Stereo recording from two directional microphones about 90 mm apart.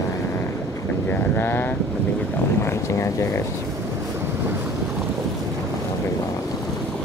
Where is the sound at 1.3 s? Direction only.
20° left (ahead or behind).